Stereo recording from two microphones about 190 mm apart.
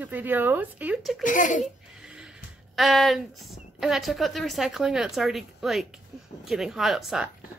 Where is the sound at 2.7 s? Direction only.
Centre (ahead or behind).